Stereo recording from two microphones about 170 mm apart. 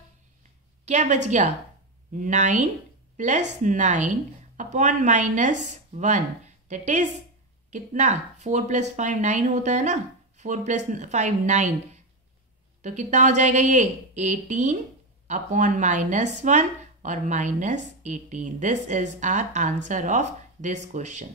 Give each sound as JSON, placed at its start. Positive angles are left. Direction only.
{"t": 0.8, "sound": "speech", "side_deg": -45}